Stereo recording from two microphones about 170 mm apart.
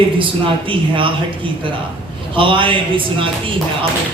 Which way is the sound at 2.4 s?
30° right (ahead or behind).